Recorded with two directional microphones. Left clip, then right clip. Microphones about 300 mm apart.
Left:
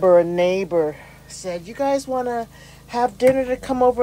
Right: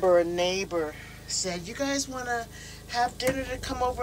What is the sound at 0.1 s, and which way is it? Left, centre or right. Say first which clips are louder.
Speech: left 8 dB; left.